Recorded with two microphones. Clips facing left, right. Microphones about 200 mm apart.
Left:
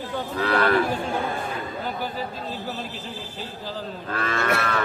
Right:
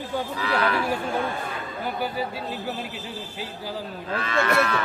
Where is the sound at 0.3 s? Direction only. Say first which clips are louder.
Left 5 dB; 55° left (ahead or behind).